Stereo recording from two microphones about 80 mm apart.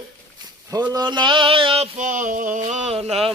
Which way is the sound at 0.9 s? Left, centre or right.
Right.